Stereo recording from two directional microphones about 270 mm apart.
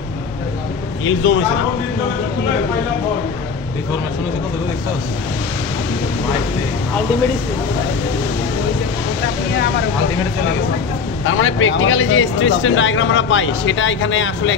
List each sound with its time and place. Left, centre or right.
1.0 s speech: left
11.2 s speech: left